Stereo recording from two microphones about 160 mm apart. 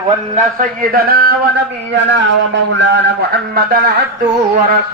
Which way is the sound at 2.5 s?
90° right.